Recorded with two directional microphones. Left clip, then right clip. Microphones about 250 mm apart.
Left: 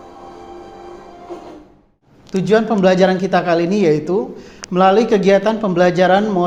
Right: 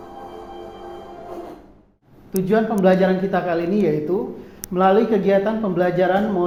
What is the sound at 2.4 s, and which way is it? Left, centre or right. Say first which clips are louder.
A man's voice: left 4 dB; left.